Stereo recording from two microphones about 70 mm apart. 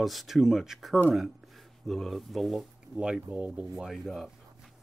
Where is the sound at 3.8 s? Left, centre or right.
Centre.